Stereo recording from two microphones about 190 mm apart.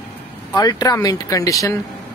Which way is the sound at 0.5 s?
20° left (ahead or behind).